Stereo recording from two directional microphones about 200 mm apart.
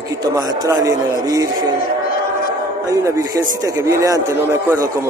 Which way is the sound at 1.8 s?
45° left (ahead or behind).